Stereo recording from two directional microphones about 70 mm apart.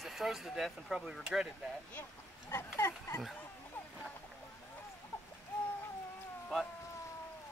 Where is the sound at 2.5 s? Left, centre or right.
Left.